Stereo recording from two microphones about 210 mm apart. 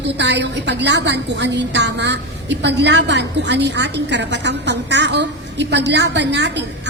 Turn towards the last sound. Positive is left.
turn(degrees=-55)  # may be behind; listen again after turning